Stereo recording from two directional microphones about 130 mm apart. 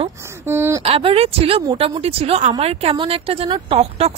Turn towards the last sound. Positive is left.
turn(degrees=-50)  # may be behind; listen again after turning